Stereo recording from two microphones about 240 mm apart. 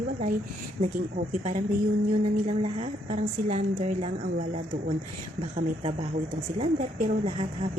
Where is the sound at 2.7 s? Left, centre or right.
Right.